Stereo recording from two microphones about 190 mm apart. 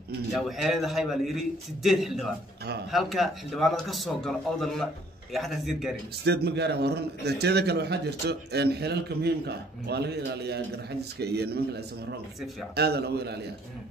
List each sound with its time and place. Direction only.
0.3 s a man's voice: centre (ahead or behind)
6.2 s a man's voice: 60° right (ahead or behind)